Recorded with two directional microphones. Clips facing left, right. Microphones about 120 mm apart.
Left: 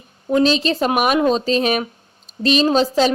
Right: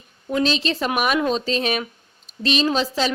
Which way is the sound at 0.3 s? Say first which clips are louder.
Left 5 dB; 35° left (ahead or behind).